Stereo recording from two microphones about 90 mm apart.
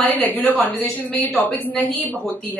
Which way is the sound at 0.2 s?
20° left (ahead or behind).